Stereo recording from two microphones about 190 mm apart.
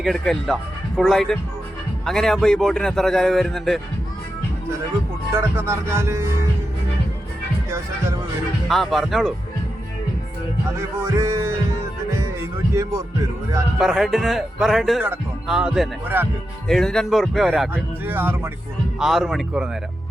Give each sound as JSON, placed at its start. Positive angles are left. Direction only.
{"t": 0.0, "sound": "speech", "side_deg": 0}
{"t": 5.3, "sound": "speech", "side_deg": -15}
{"t": 8.7, "sound": "speech", "side_deg": 0}
{"t": 10.8, "sound": "speech", "side_deg": -15}
{"t": 13.7, "sound": "speech", "side_deg": 0}